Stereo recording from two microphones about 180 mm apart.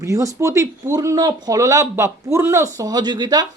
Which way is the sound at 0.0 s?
20° right (ahead or behind).